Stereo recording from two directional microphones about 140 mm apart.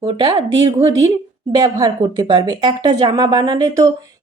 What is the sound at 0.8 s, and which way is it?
A woman's voice, 25° right (ahead or behind).